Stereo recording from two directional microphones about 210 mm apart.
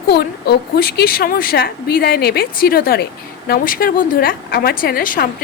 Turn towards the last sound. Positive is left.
turn(degrees=40)  # may be behind; listen again after turning